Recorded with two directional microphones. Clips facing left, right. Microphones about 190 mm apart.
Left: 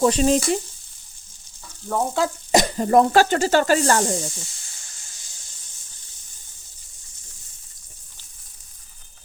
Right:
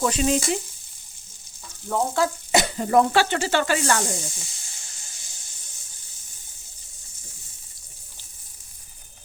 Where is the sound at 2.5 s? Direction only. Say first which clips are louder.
Left 7 dB; 40° left (ahead or behind).